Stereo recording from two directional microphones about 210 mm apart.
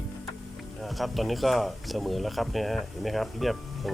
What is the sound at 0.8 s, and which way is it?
Speech, centre (ahead or behind).